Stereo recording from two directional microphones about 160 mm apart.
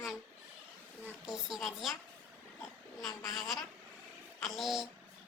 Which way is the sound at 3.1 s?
20° left (ahead or behind).